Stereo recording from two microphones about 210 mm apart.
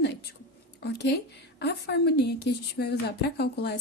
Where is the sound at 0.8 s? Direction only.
55° left (ahead or behind).